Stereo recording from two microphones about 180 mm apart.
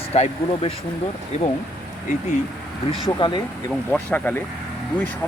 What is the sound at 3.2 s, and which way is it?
Speech, 25° left (ahead or behind).